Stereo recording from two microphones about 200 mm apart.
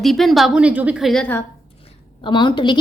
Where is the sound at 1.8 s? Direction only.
25° left (ahead or behind).